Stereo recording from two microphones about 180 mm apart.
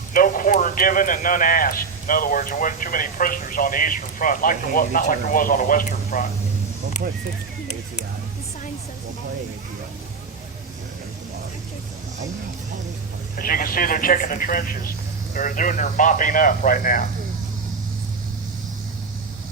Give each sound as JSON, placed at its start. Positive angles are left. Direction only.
{"t": 0.1, "sound": "a man's voice", "side_deg": 50}
{"t": 7.0, "sound": "speech", "side_deg": -60}
{"t": 13.4, "sound": "a man's voice", "side_deg": 50}